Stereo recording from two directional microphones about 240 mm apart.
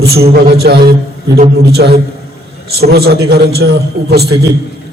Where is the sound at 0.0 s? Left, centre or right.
Right.